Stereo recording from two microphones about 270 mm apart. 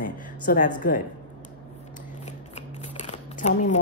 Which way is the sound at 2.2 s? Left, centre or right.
Left.